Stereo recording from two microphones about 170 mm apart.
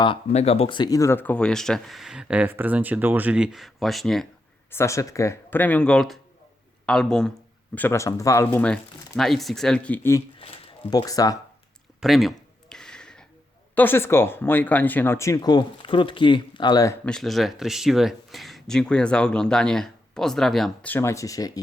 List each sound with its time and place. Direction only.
0.0 s speech: 35° left (ahead or behind); by 4.3 s centre (ahead or behind)
4.7 s speech: 15° left (ahead or behind)
7.8 s speech: 15° left (ahead or behind)
8.6 s speech: 5° left (ahead or behind)
10.4 s a sound: 35° left (ahead or behind)
10.9 s speech: 20° left (ahead or behind)
11.9 s a sound: centre (ahead or behind)
13.7 s speech: 15° left (ahead or behind)
17.1 s speech: centre (ahead or behind); by 21.6 s 20° left (ahead or behind)